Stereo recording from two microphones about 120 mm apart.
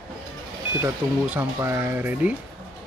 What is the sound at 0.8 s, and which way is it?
Speech, 20° right (ahead or behind).